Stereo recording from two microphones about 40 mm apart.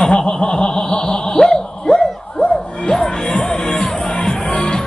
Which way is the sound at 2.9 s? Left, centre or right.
Centre.